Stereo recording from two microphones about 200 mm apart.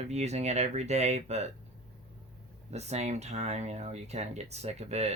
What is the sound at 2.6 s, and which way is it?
Speech, 35° right (ahead or behind).